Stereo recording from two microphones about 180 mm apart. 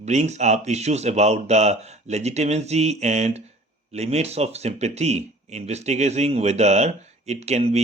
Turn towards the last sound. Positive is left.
turn(degrees=-35)  # may be behind; listen again after turning